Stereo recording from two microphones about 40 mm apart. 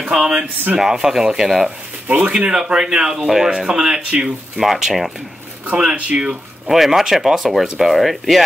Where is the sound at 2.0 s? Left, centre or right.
Right.